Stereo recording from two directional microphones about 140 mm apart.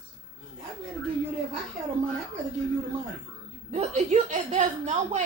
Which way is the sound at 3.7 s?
55° right (ahead or behind).